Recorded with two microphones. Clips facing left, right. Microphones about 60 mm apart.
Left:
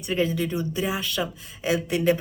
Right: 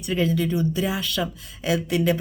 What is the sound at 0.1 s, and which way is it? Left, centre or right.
Speech, left.